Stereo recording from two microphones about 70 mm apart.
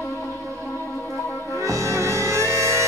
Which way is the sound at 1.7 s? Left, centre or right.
Right.